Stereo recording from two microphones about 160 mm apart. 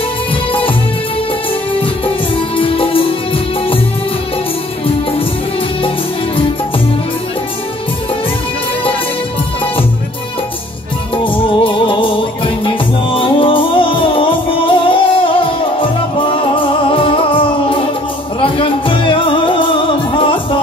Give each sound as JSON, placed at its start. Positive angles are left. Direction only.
{"t": 1.8, "sound": "music", "side_deg": 35}
{"t": 11.2, "sound": "music", "side_deg": 30}